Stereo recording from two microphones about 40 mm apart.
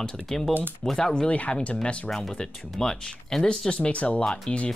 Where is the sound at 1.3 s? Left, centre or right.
Left.